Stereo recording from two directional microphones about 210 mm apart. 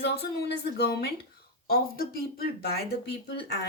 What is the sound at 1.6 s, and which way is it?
Speech, 45° left (ahead or behind).